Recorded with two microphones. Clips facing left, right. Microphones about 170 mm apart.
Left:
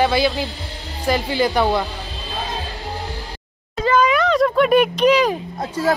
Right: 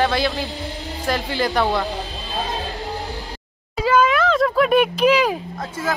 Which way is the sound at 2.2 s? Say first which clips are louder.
Left 1 dB; centre (ahead or behind).